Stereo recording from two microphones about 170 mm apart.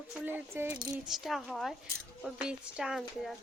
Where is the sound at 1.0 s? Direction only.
Centre (ahead or behind).